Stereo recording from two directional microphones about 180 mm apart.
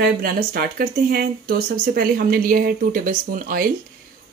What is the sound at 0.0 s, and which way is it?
Speech, 55° right (ahead or behind).